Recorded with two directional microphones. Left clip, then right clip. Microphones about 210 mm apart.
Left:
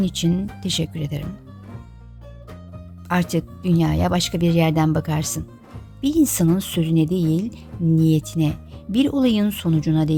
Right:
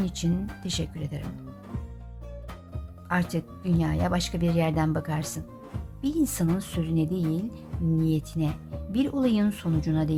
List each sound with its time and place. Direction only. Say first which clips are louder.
0.0 s speech: left 8 dB; 30° left (ahead or behind)
3.1 s speech: left 6 dB; 35° left (ahead or behind)